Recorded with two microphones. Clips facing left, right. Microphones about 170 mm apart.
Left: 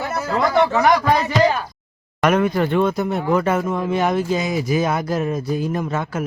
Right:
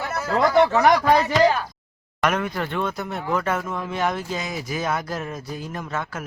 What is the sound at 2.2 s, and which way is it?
Speech, 15° left (ahead or behind).